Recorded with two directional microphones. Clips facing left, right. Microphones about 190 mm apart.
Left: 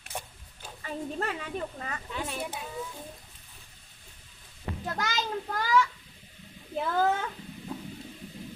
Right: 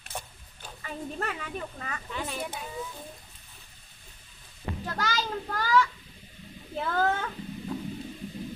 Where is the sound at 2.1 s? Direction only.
Centre (ahead or behind).